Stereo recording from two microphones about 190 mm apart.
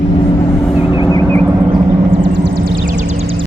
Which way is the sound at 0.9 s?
20° left (ahead or behind).